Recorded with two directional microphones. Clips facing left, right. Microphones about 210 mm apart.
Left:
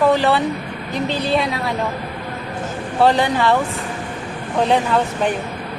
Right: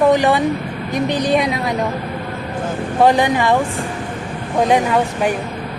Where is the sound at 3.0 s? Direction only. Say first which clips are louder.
Right 2 dB; 15° right (ahead or behind).